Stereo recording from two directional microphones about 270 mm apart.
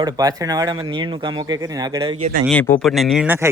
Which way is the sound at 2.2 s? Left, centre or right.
Right.